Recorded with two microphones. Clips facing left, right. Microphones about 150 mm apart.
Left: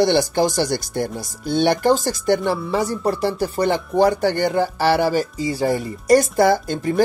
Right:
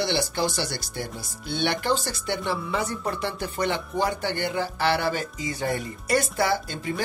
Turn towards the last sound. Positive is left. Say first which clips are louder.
# left 8 dB
turn(degrees=45)  # may be behind; listen again after turning